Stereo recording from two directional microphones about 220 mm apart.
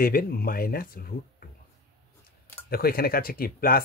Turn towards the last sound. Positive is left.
turn(degrees=40)  # may be behind; listen again after turning